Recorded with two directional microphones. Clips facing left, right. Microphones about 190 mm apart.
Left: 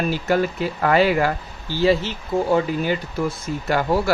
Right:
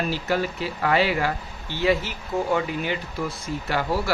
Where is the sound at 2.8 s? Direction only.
45° left (ahead or behind).